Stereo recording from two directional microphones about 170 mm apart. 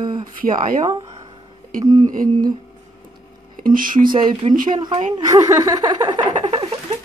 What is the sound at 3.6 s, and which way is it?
Speech, 55° right (ahead or behind).